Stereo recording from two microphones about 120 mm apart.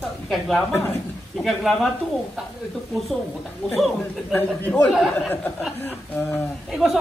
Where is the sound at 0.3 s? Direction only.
5° left (ahead or behind).